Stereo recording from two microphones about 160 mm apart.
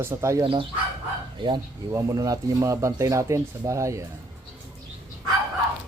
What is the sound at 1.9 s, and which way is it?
Speech, 20° right (ahead or behind).